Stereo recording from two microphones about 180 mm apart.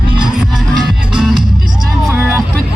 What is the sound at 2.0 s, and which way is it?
Music, 15° right (ahead or behind).